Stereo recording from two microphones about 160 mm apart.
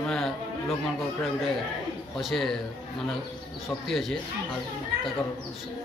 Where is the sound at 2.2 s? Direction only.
Centre (ahead or behind).